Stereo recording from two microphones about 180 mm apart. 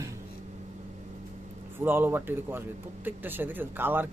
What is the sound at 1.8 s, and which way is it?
Speech, 10° right (ahead or behind).